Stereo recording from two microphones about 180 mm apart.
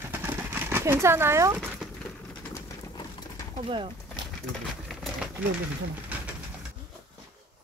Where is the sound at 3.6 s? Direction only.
30° right (ahead or behind).